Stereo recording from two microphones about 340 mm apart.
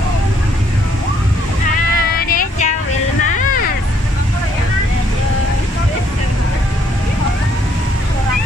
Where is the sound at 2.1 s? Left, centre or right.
Left.